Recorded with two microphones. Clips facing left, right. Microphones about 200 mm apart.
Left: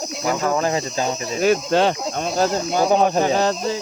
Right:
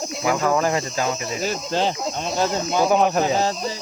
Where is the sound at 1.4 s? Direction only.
60° left (ahead or behind).